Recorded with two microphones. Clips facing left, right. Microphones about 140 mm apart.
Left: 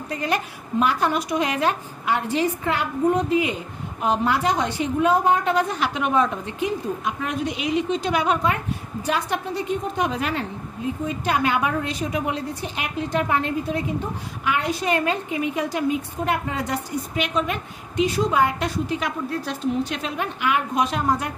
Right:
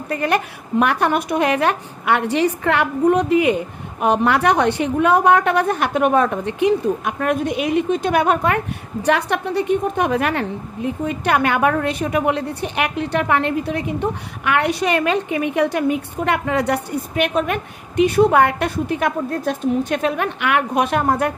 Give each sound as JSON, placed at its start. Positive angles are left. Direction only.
{"t": 0.1, "sound": "a woman's voice", "side_deg": -60}